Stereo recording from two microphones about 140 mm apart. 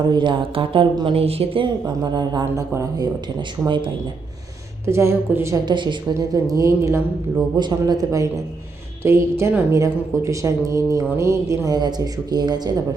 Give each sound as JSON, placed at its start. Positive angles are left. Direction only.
{"t": 0.1, "sound": "speech", "side_deg": -35}
{"t": 2.0, "sound": "speech", "side_deg": -30}
{"t": 4.9, "sound": "speech", "side_deg": -20}
{"t": 5.6, "sound": "speech", "side_deg": -35}